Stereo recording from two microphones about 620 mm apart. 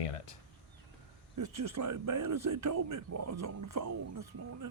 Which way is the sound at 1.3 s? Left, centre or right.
Right.